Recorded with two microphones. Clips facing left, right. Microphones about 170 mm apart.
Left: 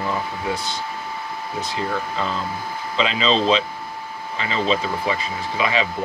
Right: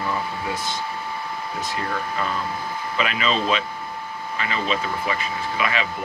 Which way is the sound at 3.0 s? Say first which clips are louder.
Left 4 dB; 25° left (ahead or behind).